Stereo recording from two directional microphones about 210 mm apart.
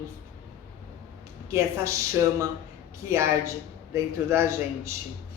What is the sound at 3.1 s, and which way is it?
Speech, 15° right (ahead or behind).